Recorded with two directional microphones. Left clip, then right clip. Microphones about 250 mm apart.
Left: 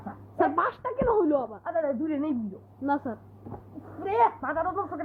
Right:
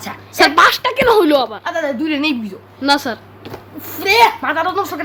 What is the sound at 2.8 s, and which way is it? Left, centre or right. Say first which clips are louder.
Speech: right 13 dB; right.